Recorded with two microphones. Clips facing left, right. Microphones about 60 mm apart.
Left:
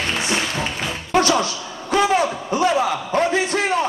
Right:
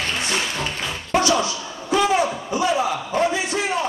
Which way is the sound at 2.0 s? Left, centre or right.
Left.